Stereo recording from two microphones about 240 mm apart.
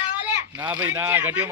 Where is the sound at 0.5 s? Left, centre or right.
Centre.